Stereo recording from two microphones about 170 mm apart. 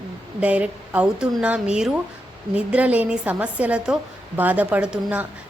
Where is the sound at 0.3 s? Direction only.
10° right (ahead or behind).